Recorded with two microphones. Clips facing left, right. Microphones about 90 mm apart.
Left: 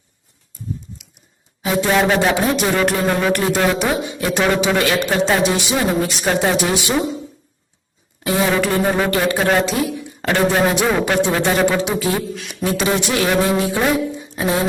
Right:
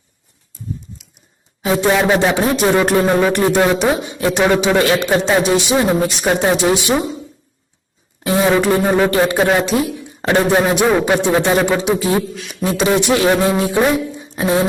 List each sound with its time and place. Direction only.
1.6 s speech: 30° right (ahead or behind)
4.3 s speech: 20° right (ahead or behind)
8.2 s speech: 25° right (ahead or behind)
12.3 s a man's voice: centre (ahead or behind)
12.6 s speech: 20° right (ahead or behind)
14.2 s music: 25° right (ahead or behind)